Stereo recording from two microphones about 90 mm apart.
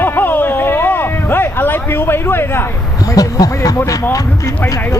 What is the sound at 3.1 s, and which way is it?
Speech, 45° left (ahead or behind).